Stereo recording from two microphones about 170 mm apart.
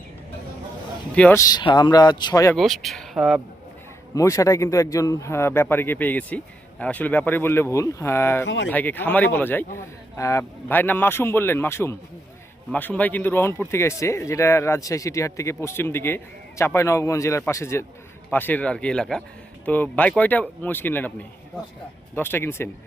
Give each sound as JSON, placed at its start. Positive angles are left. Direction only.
{"t": 1.1, "sound": "speech", "side_deg": 5}
{"t": 1.4, "sound": "speech", "side_deg": 25}
{"t": 2.6, "sound": "speech", "side_deg": 0}
{"t": 4.1, "sound": "speech", "side_deg": 20}
{"t": 8.4, "sound": "speech", "side_deg": 90}
{"t": 8.7, "sound": "speech", "side_deg": 10}
{"t": 22.1, "sound": "speech", "side_deg": 15}